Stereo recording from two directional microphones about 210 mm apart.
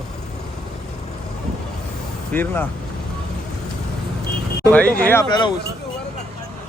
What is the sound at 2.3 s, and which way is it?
Speech, 10° left (ahead or behind).